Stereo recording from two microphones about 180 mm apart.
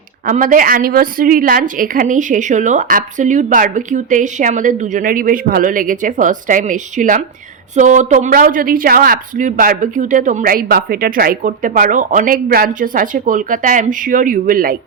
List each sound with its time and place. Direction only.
0.3 s speech: 45° right (ahead or behind)